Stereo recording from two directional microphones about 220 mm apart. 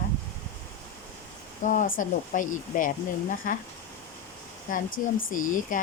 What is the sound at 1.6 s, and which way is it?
Speech, 35° left (ahead or behind).